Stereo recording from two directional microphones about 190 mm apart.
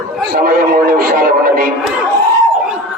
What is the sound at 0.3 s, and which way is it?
A man's voice, 50° right (ahead or behind).